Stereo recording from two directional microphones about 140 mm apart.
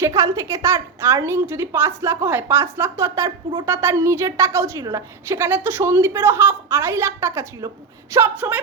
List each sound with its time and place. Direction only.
0.0 s a woman's voice: 25° right (ahead or behind)